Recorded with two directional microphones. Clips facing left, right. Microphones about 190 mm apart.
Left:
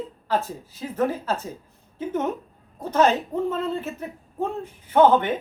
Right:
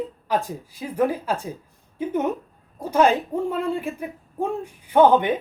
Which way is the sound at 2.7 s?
10° right (ahead or behind).